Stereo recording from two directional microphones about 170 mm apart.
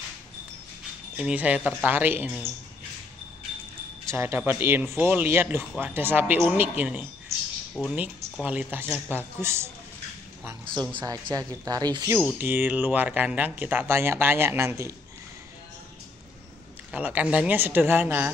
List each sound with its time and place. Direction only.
1.1 s speech: 10° right (ahead or behind)
4.1 s speech: 15° right (ahead or behind)
10.7 s speech: 25° right (ahead or behind)
12.4 s speech: 10° right (ahead or behind)
16.9 s speech: 10° right (ahead or behind)